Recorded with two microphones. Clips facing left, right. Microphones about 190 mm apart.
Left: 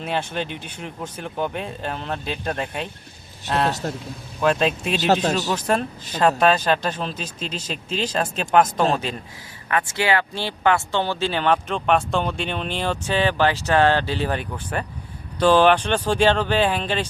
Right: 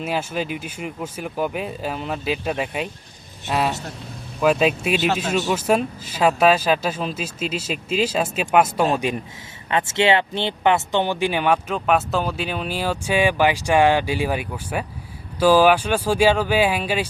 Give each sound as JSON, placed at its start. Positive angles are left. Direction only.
{"t": 0.0, "sound": "speech", "side_deg": -5}
{"t": 4.4, "sound": "speech", "side_deg": -5}
{"t": 4.9, "sound": "a man's voice", "side_deg": 40}
{"t": 5.3, "sound": "speech", "side_deg": -5}